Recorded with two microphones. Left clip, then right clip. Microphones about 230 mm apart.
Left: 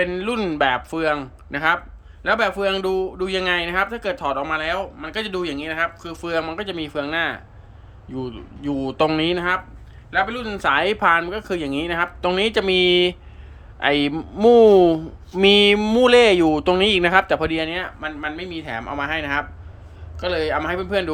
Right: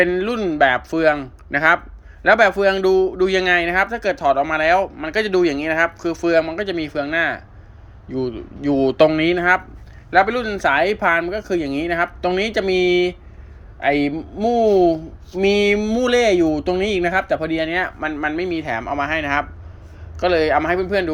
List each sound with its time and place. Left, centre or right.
0.0 s speech: centre
10.4 s speech: centre
14.2 s speech: centre